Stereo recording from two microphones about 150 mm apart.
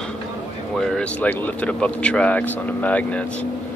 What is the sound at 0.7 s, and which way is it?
Speech, 5° left (ahead or behind).